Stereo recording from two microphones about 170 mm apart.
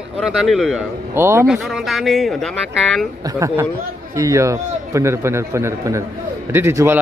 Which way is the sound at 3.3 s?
20° right (ahead or behind).